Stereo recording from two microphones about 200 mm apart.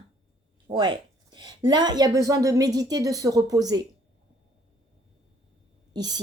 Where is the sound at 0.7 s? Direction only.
20° right (ahead or behind).